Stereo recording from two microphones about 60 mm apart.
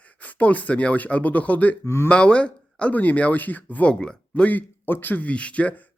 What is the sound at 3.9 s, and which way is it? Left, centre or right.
Speech, centre.